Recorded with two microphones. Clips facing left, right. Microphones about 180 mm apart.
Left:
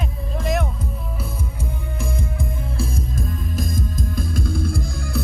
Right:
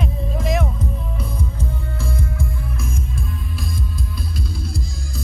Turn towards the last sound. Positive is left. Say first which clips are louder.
# left 5 dB
turn(degrees=50)  # may be behind; listen again after turning